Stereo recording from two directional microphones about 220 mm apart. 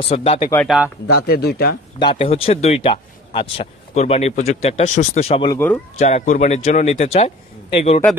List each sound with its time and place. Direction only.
0.1 s speech: 25° left (ahead or behind)
0.7 s speech: 5° right (ahead or behind)
1.0 s speech: 45° left (ahead or behind)
2.0 s a man's voice: 25° left (ahead or behind)